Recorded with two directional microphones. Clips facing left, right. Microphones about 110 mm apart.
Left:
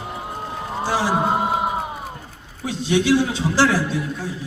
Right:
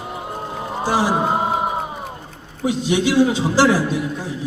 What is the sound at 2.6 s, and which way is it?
A man's voice, 15° right (ahead or behind).